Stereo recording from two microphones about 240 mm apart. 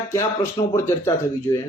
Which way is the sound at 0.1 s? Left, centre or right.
Centre.